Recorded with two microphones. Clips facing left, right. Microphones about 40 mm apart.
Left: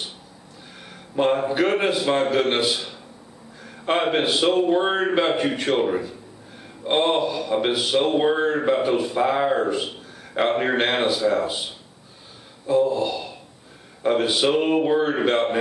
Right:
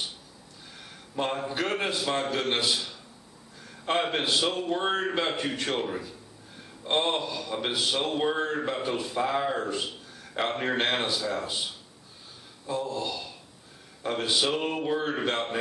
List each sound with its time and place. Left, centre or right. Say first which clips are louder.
1.1 s a man's voice: left 9 dB; centre